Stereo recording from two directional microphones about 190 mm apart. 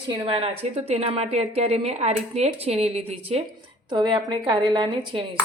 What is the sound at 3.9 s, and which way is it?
A woman's voice, 25° right (ahead or behind).